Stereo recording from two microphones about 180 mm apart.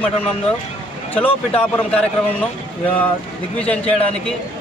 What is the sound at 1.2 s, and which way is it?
Speech, 10° left (ahead or behind).